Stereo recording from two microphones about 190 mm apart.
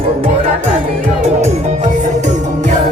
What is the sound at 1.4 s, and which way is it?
Music, 35° right (ahead or behind).